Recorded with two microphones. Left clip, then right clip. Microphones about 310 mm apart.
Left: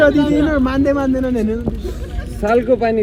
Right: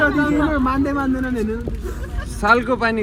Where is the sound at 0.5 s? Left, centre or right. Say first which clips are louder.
Left 4 dB; left.